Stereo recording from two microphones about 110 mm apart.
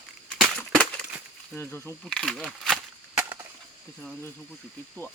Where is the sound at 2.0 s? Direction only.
5° left (ahead or behind).